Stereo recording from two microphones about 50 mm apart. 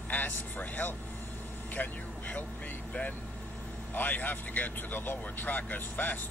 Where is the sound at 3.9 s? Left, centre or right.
Left.